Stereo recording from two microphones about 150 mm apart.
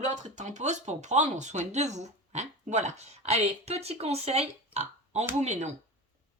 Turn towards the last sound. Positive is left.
turn(degrees=-50)  # may be behind; listen again after turning